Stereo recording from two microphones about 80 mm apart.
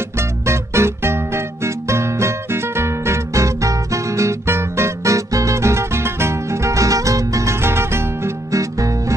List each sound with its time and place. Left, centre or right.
0.2 s music: right